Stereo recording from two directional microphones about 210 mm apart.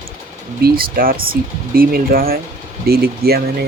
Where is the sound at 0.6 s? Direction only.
45° right (ahead or behind).